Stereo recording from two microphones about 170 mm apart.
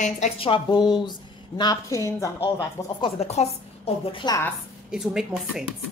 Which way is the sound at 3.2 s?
40° left (ahead or behind).